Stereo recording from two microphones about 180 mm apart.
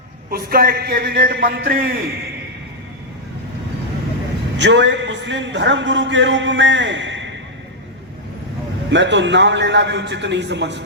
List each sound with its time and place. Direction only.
0.3 s a man's voice: 55° right (ahead or behind)
4.6 s a man's voice: 75° right (ahead or behind)
8.9 s a man's voice: 85° right